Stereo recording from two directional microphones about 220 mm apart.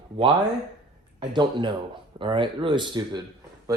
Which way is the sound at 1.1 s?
20° right (ahead or behind).